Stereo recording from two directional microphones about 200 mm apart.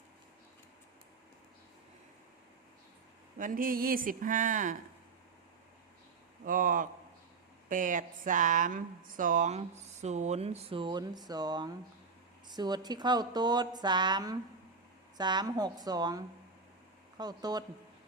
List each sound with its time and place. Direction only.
3.3 s speech: 45° right (ahead or behind)
6.4 s speech: 40° right (ahead or behind); by 17.6 s 20° right (ahead or behind)